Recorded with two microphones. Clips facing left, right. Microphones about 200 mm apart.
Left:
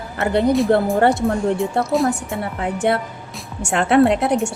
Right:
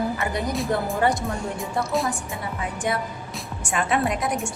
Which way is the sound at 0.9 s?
60° left (ahead or behind).